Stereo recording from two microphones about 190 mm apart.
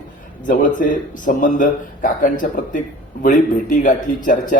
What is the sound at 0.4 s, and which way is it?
Speech, 40° left (ahead or behind).